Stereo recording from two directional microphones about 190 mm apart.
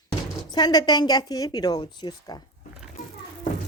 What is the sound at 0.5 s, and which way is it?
A woman's voice, 20° left (ahead or behind).